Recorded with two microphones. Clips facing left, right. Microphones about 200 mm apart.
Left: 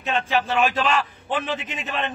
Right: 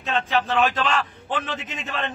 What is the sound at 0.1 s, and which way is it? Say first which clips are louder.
A man's voice: even; 10° left (ahead or behind).